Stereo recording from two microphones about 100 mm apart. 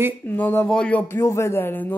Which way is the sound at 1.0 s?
25° left (ahead or behind).